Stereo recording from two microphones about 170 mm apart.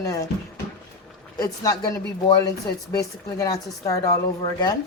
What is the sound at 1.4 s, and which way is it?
A woman's voice, 20° left (ahead or behind).